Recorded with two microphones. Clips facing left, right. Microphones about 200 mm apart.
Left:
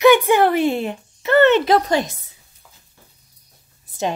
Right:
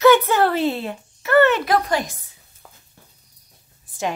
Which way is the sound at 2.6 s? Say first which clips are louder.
Right 4 dB; 55° right (ahead or behind).